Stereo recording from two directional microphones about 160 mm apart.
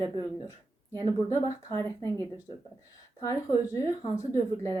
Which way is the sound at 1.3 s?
20° left (ahead or behind).